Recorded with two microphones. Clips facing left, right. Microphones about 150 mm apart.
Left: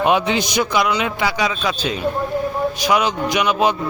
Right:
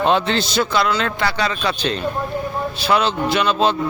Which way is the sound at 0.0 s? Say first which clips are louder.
Even; 10° left (ahead or behind).